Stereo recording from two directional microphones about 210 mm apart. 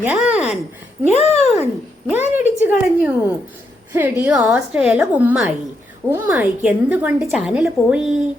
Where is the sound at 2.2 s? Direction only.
35° left (ahead or behind).